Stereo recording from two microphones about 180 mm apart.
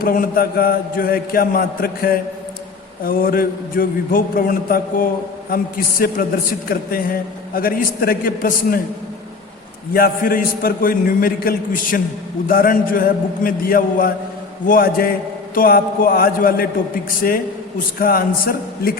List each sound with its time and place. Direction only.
0.0 s a man's voice: 55° left (ahead or behind)
9.9 s a man's voice: 55° left (ahead or behind)